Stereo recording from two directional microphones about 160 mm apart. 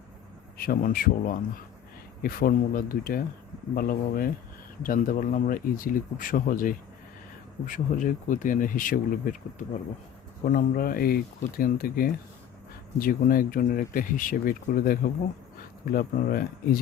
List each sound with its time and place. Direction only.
0.5 s speech: 65° left (ahead or behind)
10.4 s speech: 65° left (ahead or behind)